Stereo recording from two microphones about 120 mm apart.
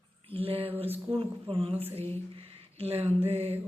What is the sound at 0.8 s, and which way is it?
Speech, 15° right (ahead or behind).